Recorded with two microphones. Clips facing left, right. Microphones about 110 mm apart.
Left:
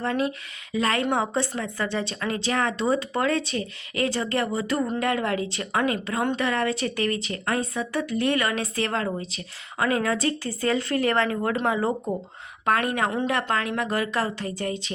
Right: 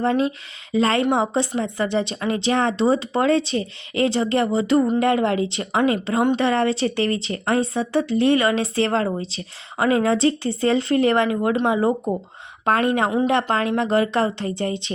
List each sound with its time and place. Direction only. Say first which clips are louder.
0.0 s speech: right 5 dB; 25° right (ahead or behind)